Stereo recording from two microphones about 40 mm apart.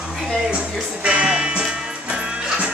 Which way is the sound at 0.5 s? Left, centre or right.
Right.